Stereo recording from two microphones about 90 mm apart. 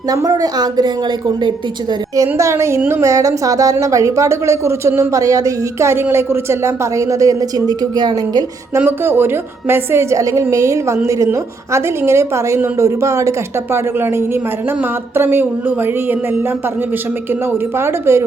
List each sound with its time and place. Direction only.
0.1 s a woman's voice: 45° right (ahead or behind)
2.1 s speech: 35° right (ahead or behind); by 8.4 s 50° right (ahead or behind)
8.9 s speech: 25° right (ahead or behind)
17.7 s speech: 30° right (ahead or behind)